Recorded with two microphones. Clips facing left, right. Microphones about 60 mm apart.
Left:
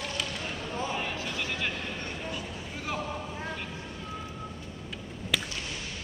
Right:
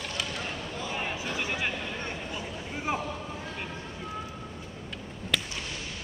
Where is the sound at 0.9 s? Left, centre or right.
Centre.